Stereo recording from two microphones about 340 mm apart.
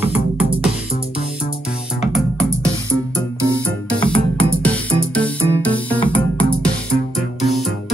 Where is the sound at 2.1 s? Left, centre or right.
Centre.